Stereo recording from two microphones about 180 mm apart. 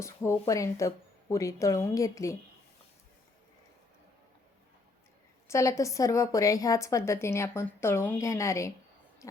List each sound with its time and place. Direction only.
0.0 s a woman's voice: 15° left (ahead or behind)
5.5 s a woman's voice: 15° left (ahead or behind)